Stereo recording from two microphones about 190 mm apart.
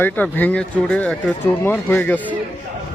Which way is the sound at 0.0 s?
10° left (ahead or behind).